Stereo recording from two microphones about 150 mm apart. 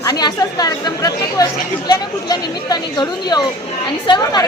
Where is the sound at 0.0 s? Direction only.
25° left (ahead or behind).